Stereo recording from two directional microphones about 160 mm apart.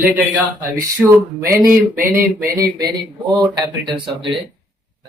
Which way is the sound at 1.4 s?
20° right (ahead or behind).